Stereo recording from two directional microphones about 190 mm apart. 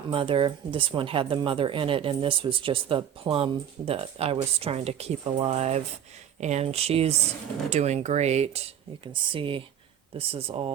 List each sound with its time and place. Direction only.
0.1 s speech: 30° right (ahead or behind)